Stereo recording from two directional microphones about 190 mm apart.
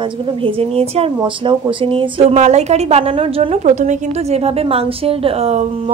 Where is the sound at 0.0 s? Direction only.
30° right (ahead or behind).